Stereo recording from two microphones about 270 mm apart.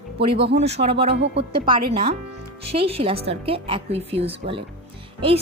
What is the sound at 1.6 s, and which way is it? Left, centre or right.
A woman's voice, centre.